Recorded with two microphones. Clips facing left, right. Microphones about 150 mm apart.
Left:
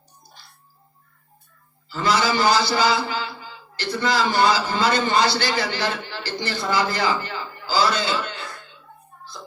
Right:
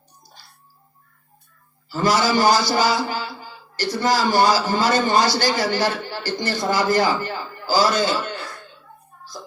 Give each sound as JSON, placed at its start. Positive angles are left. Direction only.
{"t": 1.9, "sound": "a man's voice", "side_deg": -40}